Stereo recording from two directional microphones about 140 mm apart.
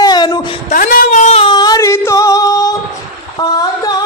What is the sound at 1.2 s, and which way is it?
Singing, 45° left (ahead or behind).